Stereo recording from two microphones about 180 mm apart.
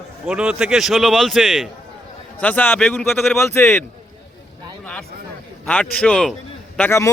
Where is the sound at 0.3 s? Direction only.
5° right (ahead or behind).